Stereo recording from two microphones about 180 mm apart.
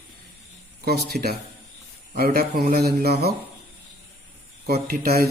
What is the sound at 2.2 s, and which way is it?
Speech, 55° right (ahead or behind).